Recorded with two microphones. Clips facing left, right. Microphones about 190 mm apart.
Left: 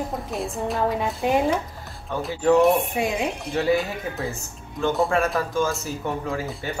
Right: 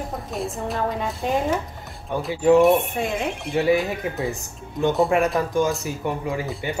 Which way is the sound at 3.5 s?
15° right (ahead or behind).